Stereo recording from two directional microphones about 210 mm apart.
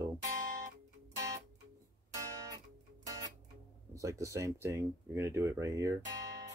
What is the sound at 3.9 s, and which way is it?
Speech, 15° right (ahead or behind).